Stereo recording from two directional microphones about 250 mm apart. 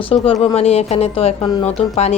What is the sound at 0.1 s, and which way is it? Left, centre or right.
Speech, left.